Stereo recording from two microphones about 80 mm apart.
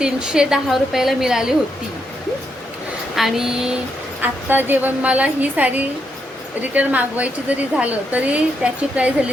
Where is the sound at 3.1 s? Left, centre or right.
Centre.